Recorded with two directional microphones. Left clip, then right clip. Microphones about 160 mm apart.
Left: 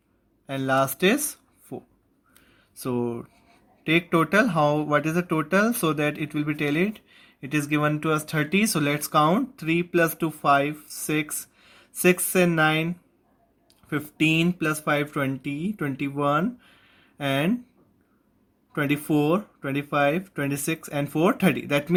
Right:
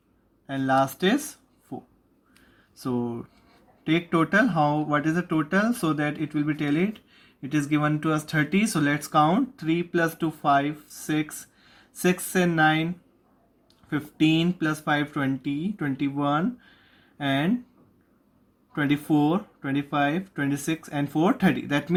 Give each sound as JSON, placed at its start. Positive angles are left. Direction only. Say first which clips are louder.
{"t": 0.4, "sound": "speech", "louder": "even", "side_deg": 45}
{"t": 2.8, "sound": "speech", "louder": "left 2 dB", "side_deg": 40}
{"t": 13.9, "sound": "speech", "louder": "even", "side_deg": 50}
{"t": 18.7, "sound": "speech", "louder": "even", "side_deg": 45}